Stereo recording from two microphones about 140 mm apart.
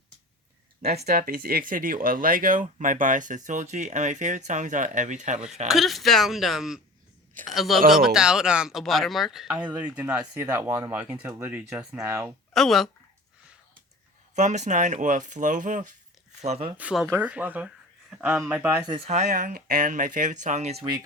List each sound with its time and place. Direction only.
1.1 s speech: 90° right; by 5.4 s 60° right (ahead or behind)
5.6 s speech: centre (ahead or behind)
11.9 s speech: 20° right (ahead or behind)
12.5 s speech: centre (ahead or behind)
14.3 s speech: 55° right (ahead or behind)
16.4 s speech: 45° right (ahead or behind)
16.7 s speech: 5° right (ahead or behind)
18.9 s speech: 45° right (ahead or behind)
19.3 s speech: 90° right; by 20.8 s 50° right (ahead or behind)